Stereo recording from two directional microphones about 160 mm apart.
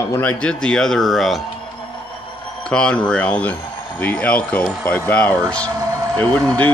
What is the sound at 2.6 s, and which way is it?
Speech, 5° left (ahead or behind).